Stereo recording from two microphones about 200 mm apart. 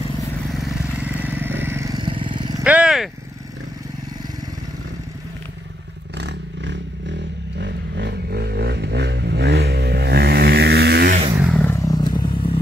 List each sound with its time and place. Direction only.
0.5 s vehicle: centre (ahead or behind); by 2.5 s 25° right (ahead or behind)
2.6 s vehicle: 5° right (ahead or behind)
6.1 s vehicle: 60° right (ahead or behind)
11.5 s vehicle: 10° left (ahead or behind)